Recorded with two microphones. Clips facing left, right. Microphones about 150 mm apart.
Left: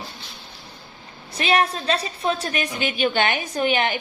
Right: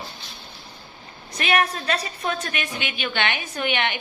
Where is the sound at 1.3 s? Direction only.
30° left (ahead or behind).